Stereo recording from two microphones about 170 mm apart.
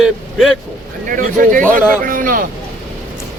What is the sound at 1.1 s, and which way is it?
A man's voice, 50° right (ahead or behind).